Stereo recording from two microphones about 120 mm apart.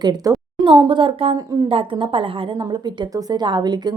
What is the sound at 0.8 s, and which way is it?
A woman's voice, 45° right (ahead or behind).